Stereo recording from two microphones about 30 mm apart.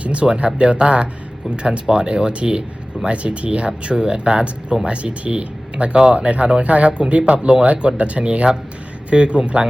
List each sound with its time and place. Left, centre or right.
0.0 s a sound: right
0.3 s speech: right
3.7 s speech: right
4.9 s speech: right
6.1 s speech: right